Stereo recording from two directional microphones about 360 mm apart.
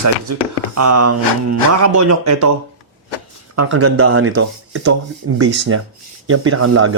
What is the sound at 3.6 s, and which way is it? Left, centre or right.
Speech, right.